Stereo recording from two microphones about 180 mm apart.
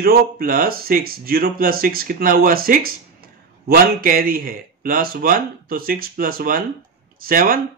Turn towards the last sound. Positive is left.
turn(degrees=-50)  # may be behind; listen again after turning